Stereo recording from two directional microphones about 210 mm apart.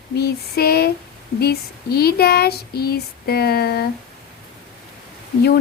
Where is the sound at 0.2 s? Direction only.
50° left (ahead or behind).